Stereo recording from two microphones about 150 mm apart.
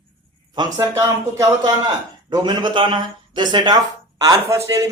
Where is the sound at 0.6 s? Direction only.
25° right (ahead or behind).